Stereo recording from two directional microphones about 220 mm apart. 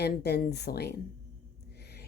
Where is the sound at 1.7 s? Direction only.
50° left (ahead or behind).